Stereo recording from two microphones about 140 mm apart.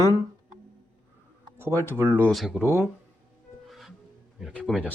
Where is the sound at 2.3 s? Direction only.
Centre (ahead or behind).